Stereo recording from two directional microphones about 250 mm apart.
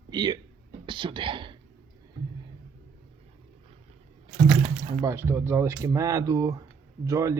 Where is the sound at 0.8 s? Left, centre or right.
Centre.